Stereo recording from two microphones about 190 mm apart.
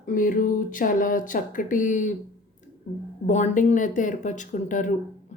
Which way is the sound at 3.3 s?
40° left (ahead or behind).